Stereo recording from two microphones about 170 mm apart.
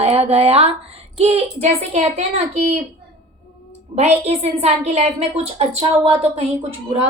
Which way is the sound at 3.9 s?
40° right (ahead or behind).